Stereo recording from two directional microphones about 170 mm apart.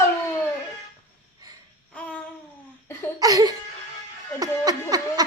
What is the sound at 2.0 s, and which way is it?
Babbling, 10° left (ahead or behind).